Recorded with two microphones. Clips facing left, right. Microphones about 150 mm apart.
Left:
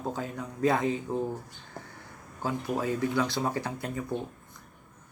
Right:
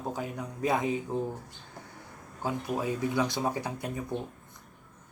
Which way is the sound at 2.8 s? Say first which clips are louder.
Left 1 dB; 15° right (ahead or behind).